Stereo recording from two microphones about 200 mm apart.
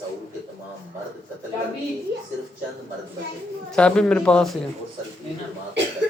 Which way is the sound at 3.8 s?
5° left (ahead or behind).